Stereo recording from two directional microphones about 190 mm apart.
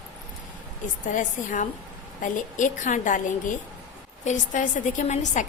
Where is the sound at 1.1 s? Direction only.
45° left (ahead or behind).